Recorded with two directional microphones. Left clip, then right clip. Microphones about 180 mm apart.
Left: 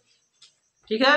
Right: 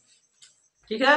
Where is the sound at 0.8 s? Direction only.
45° left (ahead or behind).